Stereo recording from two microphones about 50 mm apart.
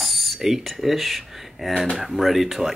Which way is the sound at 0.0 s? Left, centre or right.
Centre.